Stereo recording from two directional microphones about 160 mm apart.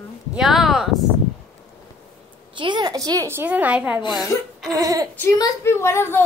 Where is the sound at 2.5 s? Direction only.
30° right (ahead or behind); by 4.0 s 10° right (ahead or behind).